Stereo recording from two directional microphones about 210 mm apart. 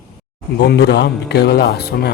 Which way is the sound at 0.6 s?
50° left (ahead or behind).